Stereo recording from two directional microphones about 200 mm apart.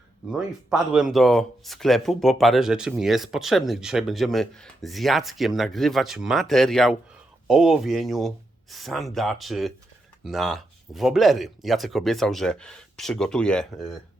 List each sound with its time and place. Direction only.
0.3 s speech: centre (ahead or behind)